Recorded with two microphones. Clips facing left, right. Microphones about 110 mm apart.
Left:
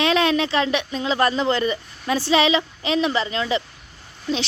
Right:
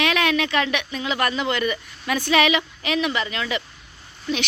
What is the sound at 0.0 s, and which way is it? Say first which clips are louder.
Speech: left 2 dB; 30° left (ahead or behind).